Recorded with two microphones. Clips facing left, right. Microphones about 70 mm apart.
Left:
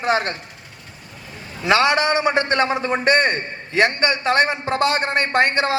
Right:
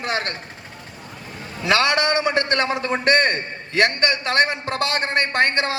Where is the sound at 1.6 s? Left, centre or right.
Left.